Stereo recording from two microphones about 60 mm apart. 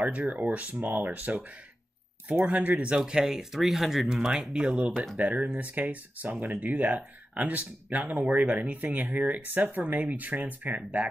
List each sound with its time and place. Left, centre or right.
0.0 s speech: right
2.5 s speech: right; by 4.7 s centre
4.7 s speech: right